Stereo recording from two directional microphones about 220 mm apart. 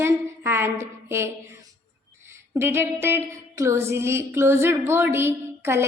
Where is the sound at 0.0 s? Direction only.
10° right (ahead or behind).